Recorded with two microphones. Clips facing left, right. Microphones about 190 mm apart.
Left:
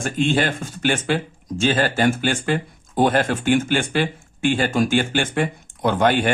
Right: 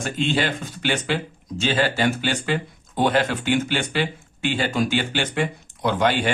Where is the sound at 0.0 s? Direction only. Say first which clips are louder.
Left 3 dB; 50° left (ahead or behind).